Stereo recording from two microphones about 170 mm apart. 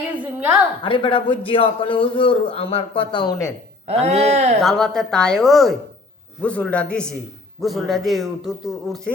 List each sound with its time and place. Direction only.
0.2 s a sound: 10° right (ahead or behind)
0.8 s a man's voice: 30° left (ahead or behind)
3.8 s speech: 40° right (ahead or behind)
4.6 s a man's voice: centre (ahead or behind)